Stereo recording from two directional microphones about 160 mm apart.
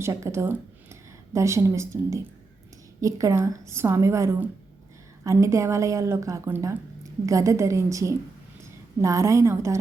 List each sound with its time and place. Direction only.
0.0 s a woman's voice: 15° right (ahead or behind)